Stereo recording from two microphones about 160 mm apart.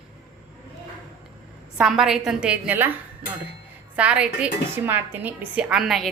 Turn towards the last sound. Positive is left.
turn(degrees=0)  # may be behind; listen again after turning